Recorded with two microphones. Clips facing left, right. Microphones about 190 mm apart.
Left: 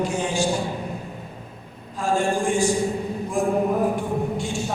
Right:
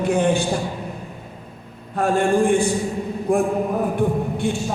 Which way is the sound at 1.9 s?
60° right (ahead or behind).